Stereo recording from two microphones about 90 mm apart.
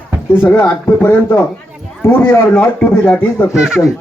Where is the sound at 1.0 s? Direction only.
25° left (ahead or behind).